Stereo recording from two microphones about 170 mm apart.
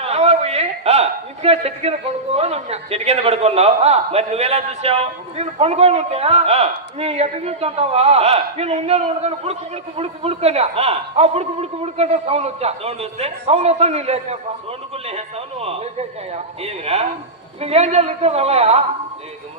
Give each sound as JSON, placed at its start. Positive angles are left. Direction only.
{"t": 0.0, "sound": "a man's voice", "side_deg": -40}